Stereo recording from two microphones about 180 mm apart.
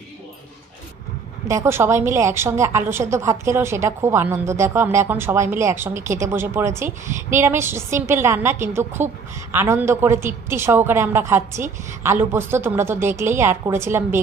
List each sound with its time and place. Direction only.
1.5 s a woman's voice: 15° right (ahead or behind)